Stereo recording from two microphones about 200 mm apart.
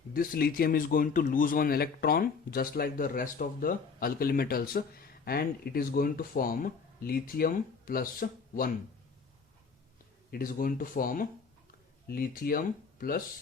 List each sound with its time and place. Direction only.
0.1 s speech: 45° left (ahead or behind)
10.3 s speech: 45° left (ahead or behind)